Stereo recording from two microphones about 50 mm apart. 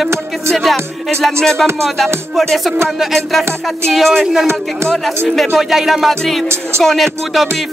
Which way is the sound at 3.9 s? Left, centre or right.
Centre.